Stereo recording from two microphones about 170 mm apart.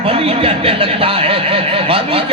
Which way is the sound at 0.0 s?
35° right (ahead or behind).